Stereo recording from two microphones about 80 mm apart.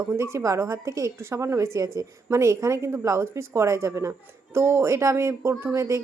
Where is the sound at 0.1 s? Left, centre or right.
Right.